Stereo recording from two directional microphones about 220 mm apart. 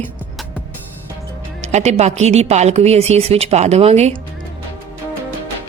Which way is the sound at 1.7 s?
30° right (ahead or behind).